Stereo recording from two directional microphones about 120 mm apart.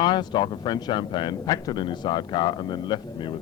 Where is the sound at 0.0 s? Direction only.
35° left (ahead or behind).